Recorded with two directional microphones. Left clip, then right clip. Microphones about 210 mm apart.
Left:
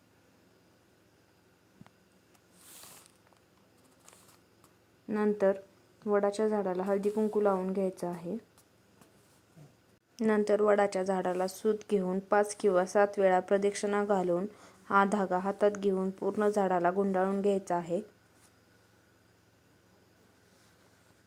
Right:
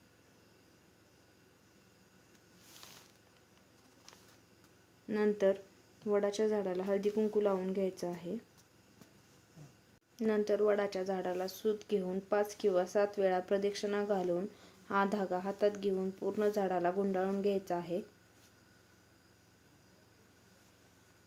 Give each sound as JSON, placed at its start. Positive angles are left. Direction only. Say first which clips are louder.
{"t": 5.0, "sound": "speech", "louder": "left 3 dB", "side_deg": 15}
{"t": 10.2, "sound": "speech", "louder": "left 4 dB", "side_deg": 20}